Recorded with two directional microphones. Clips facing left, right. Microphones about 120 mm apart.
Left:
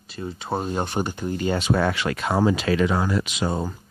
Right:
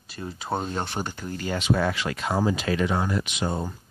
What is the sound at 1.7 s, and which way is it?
Speech, 65° left (ahead or behind).